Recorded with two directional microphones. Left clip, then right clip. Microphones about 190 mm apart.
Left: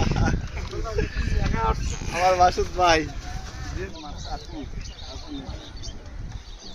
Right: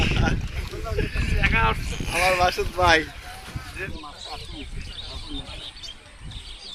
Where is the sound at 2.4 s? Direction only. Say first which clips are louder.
Left 2 dB; 60° left (ahead or behind).